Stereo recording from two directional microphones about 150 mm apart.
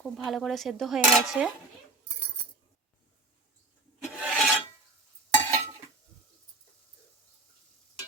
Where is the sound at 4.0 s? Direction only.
5° right (ahead or behind).